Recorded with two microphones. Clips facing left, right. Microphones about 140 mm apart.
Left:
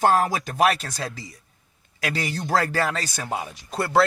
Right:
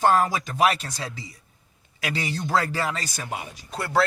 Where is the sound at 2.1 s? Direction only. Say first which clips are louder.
Left 1 dB; 60° left (ahead or behind).